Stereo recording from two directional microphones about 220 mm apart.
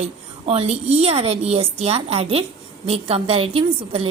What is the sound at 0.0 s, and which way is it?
A woman's voice, 30° right (ahead or behind).